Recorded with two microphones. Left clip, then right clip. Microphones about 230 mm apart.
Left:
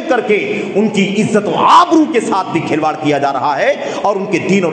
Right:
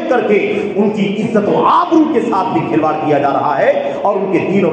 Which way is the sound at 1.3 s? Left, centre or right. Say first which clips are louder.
Left 3 dB; left.